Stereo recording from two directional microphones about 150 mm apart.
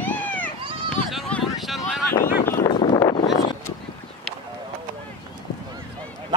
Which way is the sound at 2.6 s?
30° left (ahead or behind).